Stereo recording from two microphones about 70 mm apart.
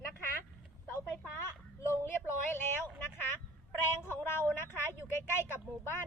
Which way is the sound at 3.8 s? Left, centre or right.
Left.